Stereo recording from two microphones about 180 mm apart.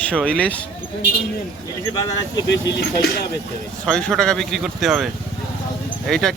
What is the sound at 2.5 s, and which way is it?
Speech, 75° left (ahead or behind).